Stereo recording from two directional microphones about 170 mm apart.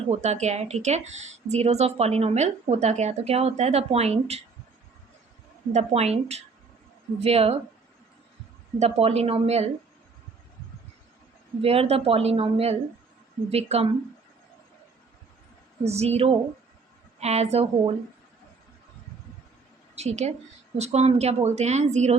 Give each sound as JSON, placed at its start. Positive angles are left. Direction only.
{"t": 0.1, "sound": "a woman's voice", "side_deg": -40}
{"t": 5.7, "sound": "a woman's voice", "side_deg": -40}
{"t": 8.8, "sound": "a woman's voice", "side_deg": -35}
{"t": 11.6, "sound": "a woman's voice", "side_deg": -35}
{"t": 15.8, "sound": "a woman's voice", "side_deg": -40}
{"t": 20.0, "sound": "a woman's voice", "side_deg": -40}